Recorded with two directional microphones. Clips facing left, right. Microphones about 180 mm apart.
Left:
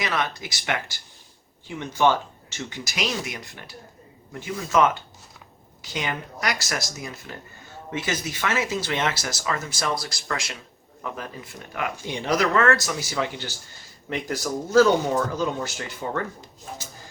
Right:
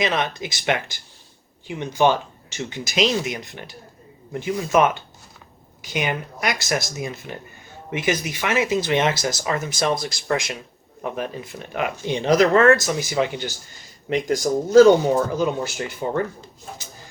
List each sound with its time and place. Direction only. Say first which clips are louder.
0.0 s speech: right 4 dB; 20° right (ahead or behind)